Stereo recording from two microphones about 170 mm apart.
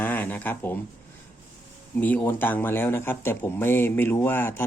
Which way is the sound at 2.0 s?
10° left (ahead or behind).